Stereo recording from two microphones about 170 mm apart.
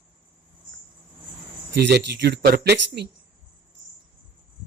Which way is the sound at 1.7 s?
80° right.